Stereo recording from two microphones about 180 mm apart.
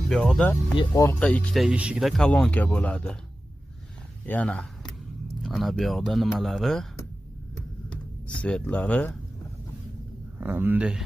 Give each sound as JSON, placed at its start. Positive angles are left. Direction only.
{"t": 0.1, "sound": "speech", "side_deg": 0}
{"t": 0.7, "sound": "speech", "side_deg": 20}
{"t": 1.2, "sound": "speech", "side_deg": 5}
{"t": 4.3, "sound": "speech", "side_deg": 5}
{"t": 7.9, "sound": "a sound", "side_deg": 5}
{"t": 10.4, "sound": "speech", "side_deg": -10}